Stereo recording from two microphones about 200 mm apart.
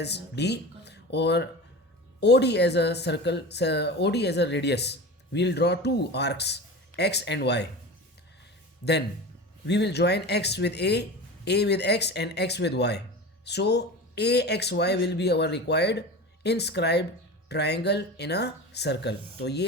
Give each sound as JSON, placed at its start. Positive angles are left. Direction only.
{"t": 0.0, "sound": "speech", "side_deg": 55}
{"t": 8.8, "sound": "speech", "side_deg": 55}